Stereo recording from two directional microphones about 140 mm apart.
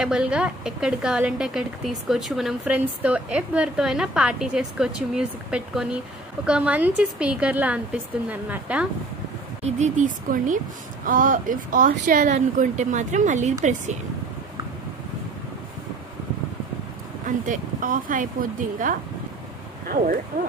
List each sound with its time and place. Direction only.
0.0 s a woman's voice: 5° right (ahead or behind)
9.6 s a woman's voice: 50° right (ahead or behind)
17.3 s speech: 70° right (ahead or behind)